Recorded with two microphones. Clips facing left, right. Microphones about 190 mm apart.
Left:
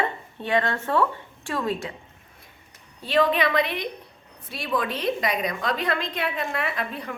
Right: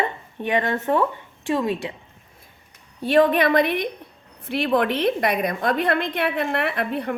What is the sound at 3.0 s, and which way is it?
A woman's voice, 50° right (ahead or behind).